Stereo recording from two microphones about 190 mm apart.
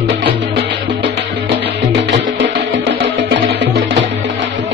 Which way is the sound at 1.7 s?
65° right (ahead or behind).